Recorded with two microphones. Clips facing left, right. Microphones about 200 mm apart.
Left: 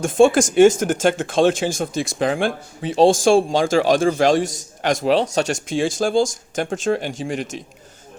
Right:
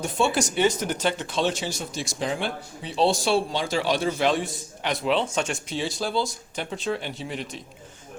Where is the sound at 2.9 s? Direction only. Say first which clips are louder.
Left 8 dB; 45° left (ahead or behind).